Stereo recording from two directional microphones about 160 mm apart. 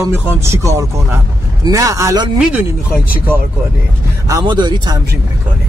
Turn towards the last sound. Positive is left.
turn(degrees=-30)  # may be behind; listen again after turning